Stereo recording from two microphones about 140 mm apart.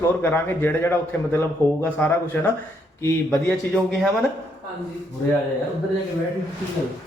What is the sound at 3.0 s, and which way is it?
Speech, 20° left (ahead or behind).